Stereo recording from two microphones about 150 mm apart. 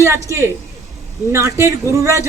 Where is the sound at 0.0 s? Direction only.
20° right (ahead or behind).